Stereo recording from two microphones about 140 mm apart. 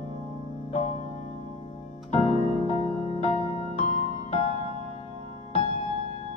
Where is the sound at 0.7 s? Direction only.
45° left (ahead or behind).